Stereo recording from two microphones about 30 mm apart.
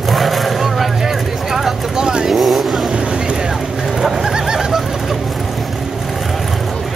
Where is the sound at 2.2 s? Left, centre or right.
Centre.